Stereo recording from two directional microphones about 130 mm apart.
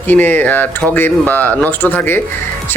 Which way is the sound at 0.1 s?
15° left (ahead or behind).